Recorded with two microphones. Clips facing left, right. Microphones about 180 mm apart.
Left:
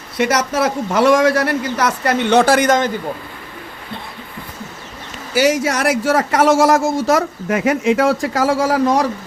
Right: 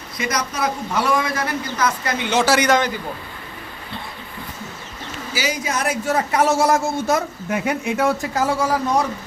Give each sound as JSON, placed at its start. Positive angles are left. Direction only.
{"t": 0.2, "sound": "a man's voice", "side_deg": 75}
{"t": 2.3, "sound": "speech", "side_deg": 55}
{"t": 5.3, "sound": "speech", "side_deg": 65}